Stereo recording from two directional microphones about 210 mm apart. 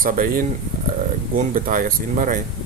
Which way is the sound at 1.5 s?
40° right (ahead or behind).